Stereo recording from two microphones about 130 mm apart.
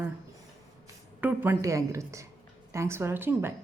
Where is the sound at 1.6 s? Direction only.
25° right (ahead or behind).